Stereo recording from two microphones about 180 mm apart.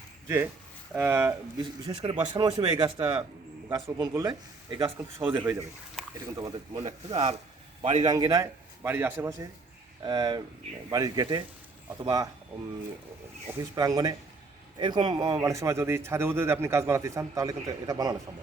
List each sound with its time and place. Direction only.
0.9 s a man's voice: 10° right (ahead or behind)
1.9 s a man's voice: 25° right (ahead or behind)
7.1 s a man's voice: 35° right (ahead or behind)
8.0 s a man's voice: 20° right (ahead or behind)
10.0 s speech: 25° right (ahead or behind)
13.5 s a man's voice: 15° right (ahead or behind)